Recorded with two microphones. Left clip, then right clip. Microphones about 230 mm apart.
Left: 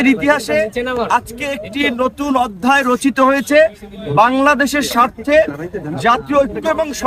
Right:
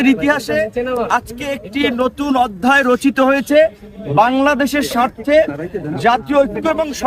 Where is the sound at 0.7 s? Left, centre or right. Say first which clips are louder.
Even; left.